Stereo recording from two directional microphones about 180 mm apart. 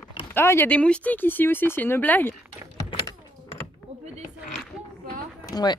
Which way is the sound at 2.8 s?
20° left (ahead or behind).